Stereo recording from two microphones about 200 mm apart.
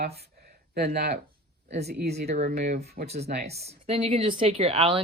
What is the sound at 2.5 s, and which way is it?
Speech, 50° right (ahead or behind).